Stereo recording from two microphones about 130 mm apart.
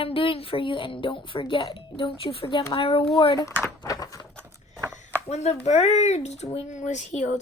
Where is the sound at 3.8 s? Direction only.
30° left (ahead or behind).